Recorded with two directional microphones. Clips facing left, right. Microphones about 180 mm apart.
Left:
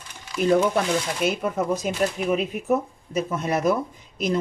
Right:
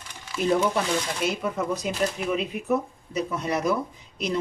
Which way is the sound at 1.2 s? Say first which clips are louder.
Left 4 dB; 50° left (ahead or behind).